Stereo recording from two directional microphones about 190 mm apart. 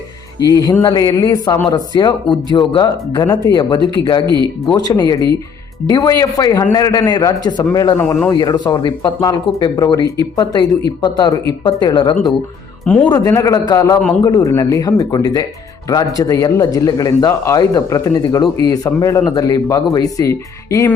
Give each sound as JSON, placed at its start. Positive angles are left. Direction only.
{"t": 0.6, "sound": "speech", "side_deg": 20}
{"t": 12.8, "sound": "a man's voice", "side_deg": 5}
{"t": 13.1, "sound": "speech", "side_deg": 15}